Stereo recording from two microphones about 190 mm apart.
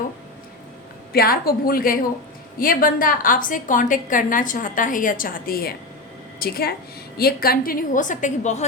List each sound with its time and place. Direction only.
1.1 s a woman's voice: 50° left (ahead or behind)